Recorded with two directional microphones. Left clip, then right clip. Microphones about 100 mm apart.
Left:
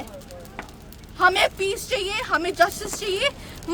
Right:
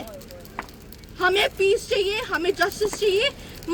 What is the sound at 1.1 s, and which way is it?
A woman's voice, 35° left (ahead or behind).